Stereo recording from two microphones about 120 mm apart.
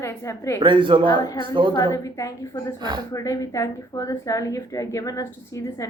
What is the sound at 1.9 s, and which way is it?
A woman's voice, 30° left (ahead or behind).